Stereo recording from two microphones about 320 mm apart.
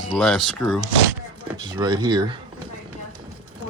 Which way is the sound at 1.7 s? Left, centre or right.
Centre.